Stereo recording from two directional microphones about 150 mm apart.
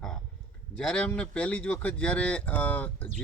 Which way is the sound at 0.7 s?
5° left (ahead or behind).